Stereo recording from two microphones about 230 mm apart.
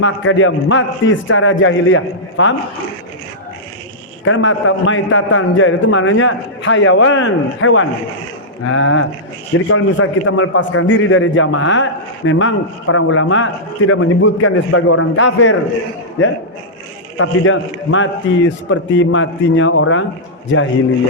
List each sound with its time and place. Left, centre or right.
0.0 s a man's voice: left
4.3 s a man's voice: left